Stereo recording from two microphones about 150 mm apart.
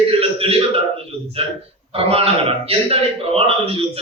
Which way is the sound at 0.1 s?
40° right (ahead or behind).